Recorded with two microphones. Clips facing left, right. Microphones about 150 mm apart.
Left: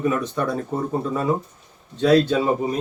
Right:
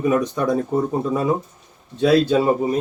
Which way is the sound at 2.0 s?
10° right (ahead or behind).